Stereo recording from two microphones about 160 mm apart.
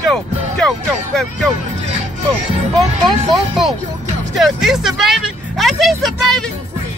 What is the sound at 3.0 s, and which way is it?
Speech, centre (ahead or behind).